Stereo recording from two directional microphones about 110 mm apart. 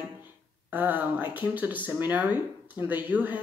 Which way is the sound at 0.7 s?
15° right (ahead or behind).